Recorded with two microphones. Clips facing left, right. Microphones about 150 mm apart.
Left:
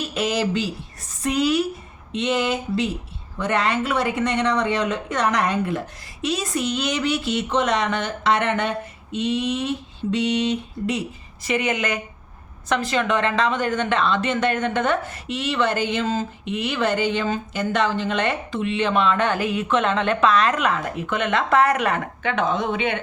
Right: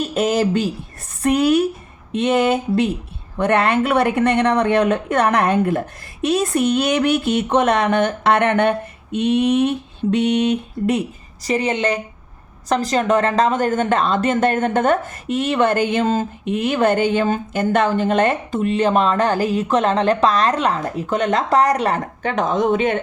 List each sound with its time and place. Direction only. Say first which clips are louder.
0.0 s speech: right 5 dB; 45° right (ahead or behind)
11.4 s speech: right 4 dB; 35° right (ahead or behind)